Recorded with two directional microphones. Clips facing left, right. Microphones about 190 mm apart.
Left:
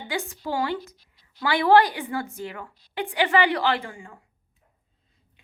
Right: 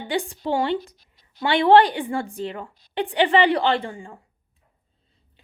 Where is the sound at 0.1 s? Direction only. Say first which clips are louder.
Right 5 dB; 30° right (ahead or behind).